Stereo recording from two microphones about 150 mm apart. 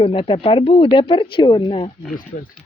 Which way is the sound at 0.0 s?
35° left (ahead or behind).